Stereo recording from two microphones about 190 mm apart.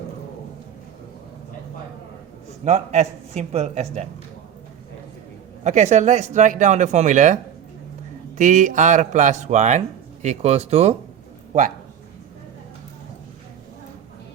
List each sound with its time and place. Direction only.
2.6 s speech: 35° right (ahead or behind)
5.6 s speech: 40° right (ahead or behind)
8.4 s speech: 40° right (ahead or behind)